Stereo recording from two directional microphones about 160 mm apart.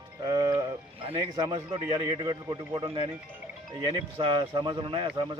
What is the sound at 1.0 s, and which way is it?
A man's voice, 35° right (ahead or behind).